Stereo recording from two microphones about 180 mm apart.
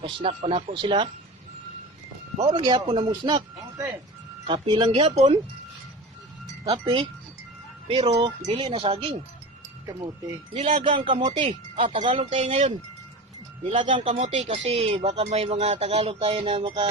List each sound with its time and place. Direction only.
0.0 s speech: 30° right (ahead or behind)
2.4 s speech: 25° right (ahead or behind)
6.7 s speech: 30° right (ahead or behind)
10.5 s speech: 40° right (ahead or behind)
10.8 s speech: 30° right (ahead or behind)